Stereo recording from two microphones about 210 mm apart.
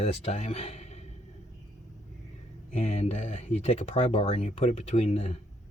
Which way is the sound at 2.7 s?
30° left (ahead or behind).